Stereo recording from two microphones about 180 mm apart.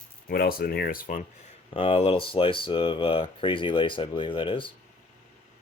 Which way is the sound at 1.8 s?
30° left (ahead or behind).